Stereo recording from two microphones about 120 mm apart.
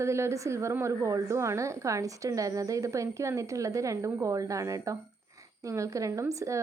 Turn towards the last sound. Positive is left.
turn(degrees=-25)  # may be behind; listen again after turning